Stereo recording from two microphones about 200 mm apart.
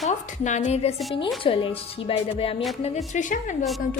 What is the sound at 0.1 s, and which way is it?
A woman's voice, 35° left (ahead or behind).